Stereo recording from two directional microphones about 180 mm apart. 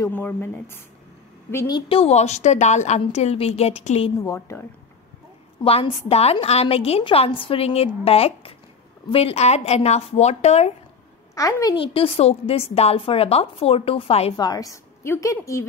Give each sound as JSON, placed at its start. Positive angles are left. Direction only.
{"t": 0.0, "sound": "a woman's voice", "side_deg": 10}
{"t": 4.2, "sound": "a woman's voice", "side_deg": 15}
{"t": 5.6, "sound": "a woman's voice", "side_deg": 30}
{"t": 11.3, "sound": "a woman's voice", "side_deg": 20}
{"t": 14.3, "sound": "a woman's voice", "side_deg": 20}